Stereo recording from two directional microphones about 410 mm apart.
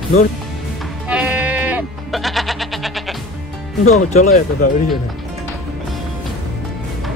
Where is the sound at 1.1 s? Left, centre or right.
Centre.